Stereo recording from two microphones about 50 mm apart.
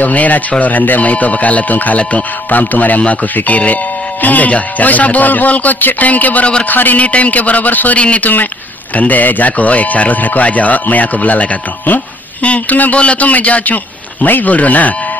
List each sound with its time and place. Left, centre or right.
0.0 s speech: left